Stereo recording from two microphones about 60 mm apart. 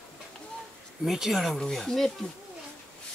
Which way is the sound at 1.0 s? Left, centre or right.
Centre.